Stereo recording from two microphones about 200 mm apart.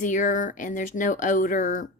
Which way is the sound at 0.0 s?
40° left (ahead or behind).